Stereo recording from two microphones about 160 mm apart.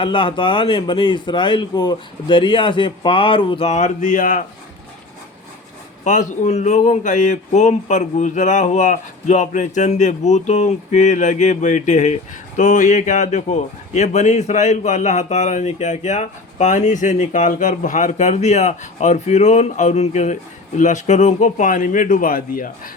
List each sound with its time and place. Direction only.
0.0 s speech: 30° left (ahead or behind); by 4.4 s 55° left (ahead or behind)
6.1 s a man's voice: 50° left (ahead or behind)